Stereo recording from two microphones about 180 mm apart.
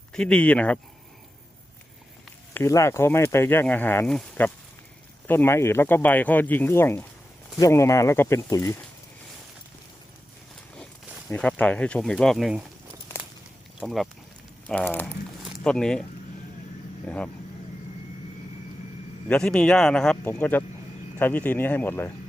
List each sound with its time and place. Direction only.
0.1 s speech: 5° left (ahead or behind)
2.5 s speech: 15° left (ahead or behind)
11.3 s speech: 10° left (ahead or behind)
13.7 s speech: centre (ahead or behind)
17.1 s speech: 5° left (ahead or behind)
19.3 s speech: 5° left (ahead or behind)